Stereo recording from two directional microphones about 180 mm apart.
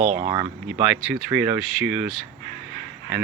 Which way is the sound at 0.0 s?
45° right (ahead or behind).